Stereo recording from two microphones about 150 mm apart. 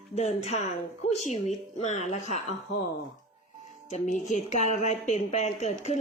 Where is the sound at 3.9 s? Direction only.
50° left (ahead or behind).